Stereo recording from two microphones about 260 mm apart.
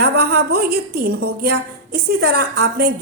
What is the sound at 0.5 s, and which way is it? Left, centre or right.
A woman's voice, right.